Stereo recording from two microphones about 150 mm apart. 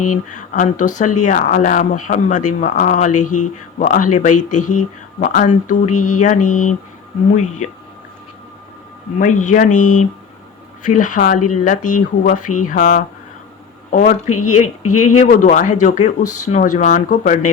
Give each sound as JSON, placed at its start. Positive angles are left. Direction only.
{"t": 0.3, "sound": "speech", "side_deg": 60}
{"t": 9.1, "sound": "speech", "side_deg": 60}